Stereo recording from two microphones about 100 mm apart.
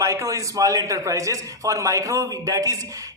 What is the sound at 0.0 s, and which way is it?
A man's voice, 30° right (ahead or behind).